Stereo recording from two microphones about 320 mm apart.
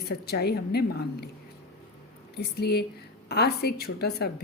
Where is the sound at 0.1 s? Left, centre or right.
Left.